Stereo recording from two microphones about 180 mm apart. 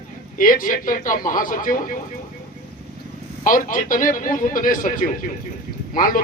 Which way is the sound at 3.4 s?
50° left (ahead or behind).